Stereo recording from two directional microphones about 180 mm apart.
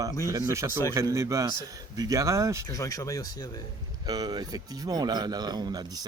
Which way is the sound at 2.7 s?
20° left (ahead or behind).